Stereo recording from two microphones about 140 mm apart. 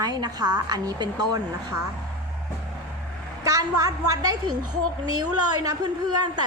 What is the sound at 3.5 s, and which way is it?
A woman's voice, 25° right (ahead or behind).